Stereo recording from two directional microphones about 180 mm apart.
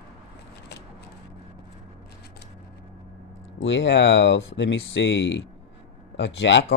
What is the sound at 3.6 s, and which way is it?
Speech, 85° left.